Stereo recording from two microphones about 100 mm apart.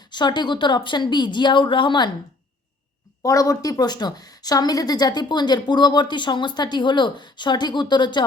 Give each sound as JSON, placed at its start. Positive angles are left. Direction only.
{"t": 0.1, "sound": "a woman's voice", "side_deg": 50}
{"t": 3.2, "sound": "a woman's voice", "side_deg": 35}